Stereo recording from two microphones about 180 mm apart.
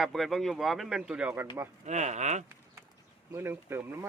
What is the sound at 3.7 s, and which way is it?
Speech, 10° right (ahead or behind).